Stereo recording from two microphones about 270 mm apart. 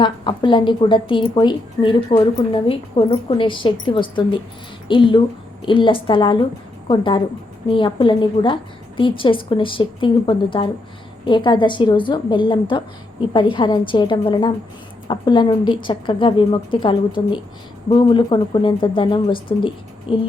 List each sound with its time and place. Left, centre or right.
0.0 s a woman's voice: centre